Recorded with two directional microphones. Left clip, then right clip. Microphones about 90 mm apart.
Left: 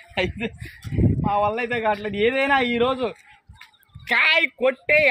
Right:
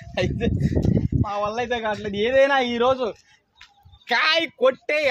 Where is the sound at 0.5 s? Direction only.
25° right (ahead or behind).